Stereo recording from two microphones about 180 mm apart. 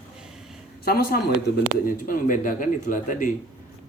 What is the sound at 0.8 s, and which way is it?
Speech, 60° left (ahead or behind).